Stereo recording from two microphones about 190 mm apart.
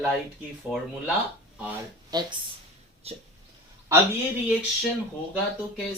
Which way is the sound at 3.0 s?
30° right (ahead or behind).